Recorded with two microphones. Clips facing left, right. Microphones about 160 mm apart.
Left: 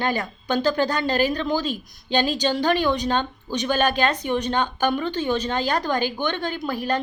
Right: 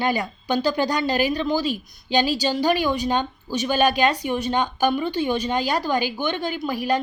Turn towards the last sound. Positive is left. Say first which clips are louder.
# right 2 dB
turn(degrees=-10)  # may be behind; listen again after turning